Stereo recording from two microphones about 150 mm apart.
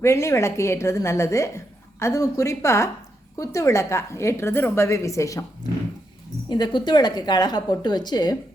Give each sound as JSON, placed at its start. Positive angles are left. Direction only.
{"t": 0.0, "sound": "a woman's voice", "side_deg": 20}
{"t": 6.5, "sound": "a woman's voice", "side_deg": 30}